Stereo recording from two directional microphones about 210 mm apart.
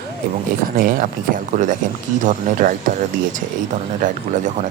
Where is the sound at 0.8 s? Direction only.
40° right (ahead or behind).